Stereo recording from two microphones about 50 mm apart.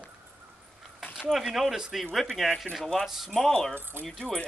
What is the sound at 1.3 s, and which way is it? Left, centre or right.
Speech, centre.